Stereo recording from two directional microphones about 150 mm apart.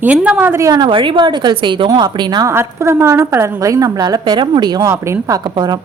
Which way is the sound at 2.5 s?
20° right (ahead or behind).